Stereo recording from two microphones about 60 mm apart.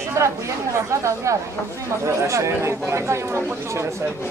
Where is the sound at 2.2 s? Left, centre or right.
Right.